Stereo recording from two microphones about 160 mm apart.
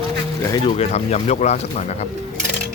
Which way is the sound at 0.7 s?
40° left (ahead or behind).